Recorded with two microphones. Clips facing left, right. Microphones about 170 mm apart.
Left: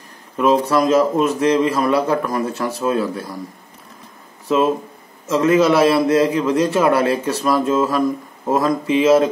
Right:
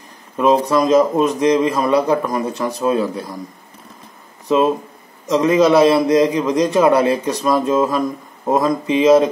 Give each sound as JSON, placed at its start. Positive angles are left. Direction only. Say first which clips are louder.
{"t": 0.4, "sound": "a man's voice", "louder": "right 1 dB", "side_deg": -20}
{"t": 5.2, "sound": "a man's voice", "louder": "right 1 dB", "side_deg": -15}